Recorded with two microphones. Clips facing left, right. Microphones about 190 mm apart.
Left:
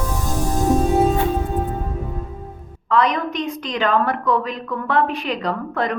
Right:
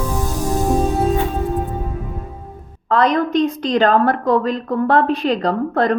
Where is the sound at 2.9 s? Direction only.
35° right (ahead or behind).